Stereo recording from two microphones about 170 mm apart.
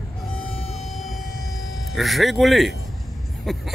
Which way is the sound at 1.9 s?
Centre (ahead or behind).